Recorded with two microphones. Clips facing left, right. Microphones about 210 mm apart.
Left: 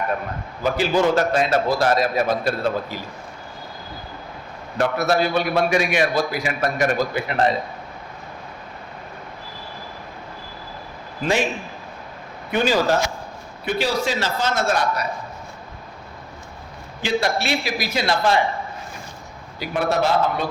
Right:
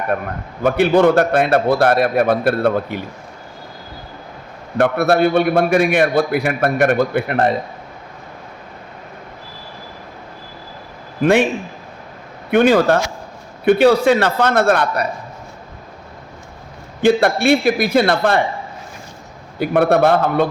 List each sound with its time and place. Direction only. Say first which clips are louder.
0.6 s a man's voice: right 6 dB; 60° right (ahead or behind)
4.8 s a man's voice: right 6 dB; 55° right (ahead or behind)
11.2 s a man's voice: right 8 dB; 60° right (ahead or behind)
12.5 s a man's voice: right 7 dB; 60° right (ahead or behind)
17.0 s a man's voice: right 8 dB; 55° right (ahead or behind)
19.5 s a man's voice: right 8 dB; 55° right (ahead or behind)